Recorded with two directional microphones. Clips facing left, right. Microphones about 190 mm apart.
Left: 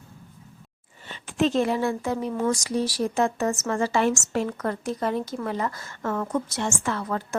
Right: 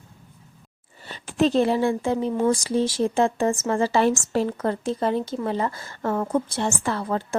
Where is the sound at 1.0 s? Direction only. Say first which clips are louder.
Right 2 dB; 35° right (ahead or behind).